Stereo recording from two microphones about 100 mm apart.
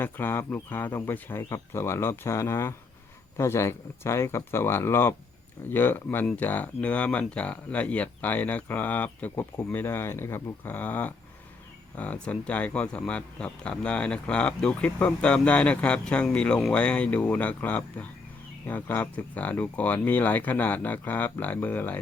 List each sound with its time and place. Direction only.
0.0 s speech: 20° left (ahead or behind)